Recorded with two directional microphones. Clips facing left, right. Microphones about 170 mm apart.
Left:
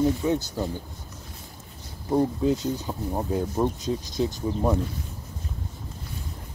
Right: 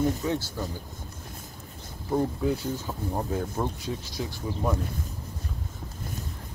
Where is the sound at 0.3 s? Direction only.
20° left (ahead or behind).